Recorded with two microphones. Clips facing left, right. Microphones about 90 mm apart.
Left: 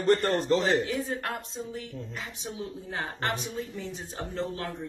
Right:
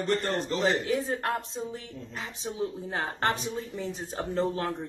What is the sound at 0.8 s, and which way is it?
Speech, 35° right (ahead or behind).